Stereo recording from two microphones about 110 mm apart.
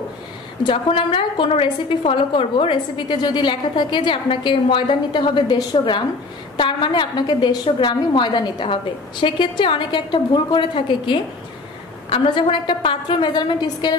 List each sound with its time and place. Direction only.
0.7 s a woman's voice: 55° left (ahead or behind)